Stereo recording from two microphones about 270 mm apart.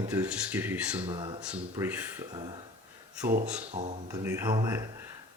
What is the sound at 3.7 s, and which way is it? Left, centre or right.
Speech, right.